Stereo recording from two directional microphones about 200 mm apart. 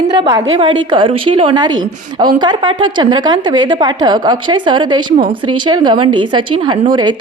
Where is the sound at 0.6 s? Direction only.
25° right (ahead or behind).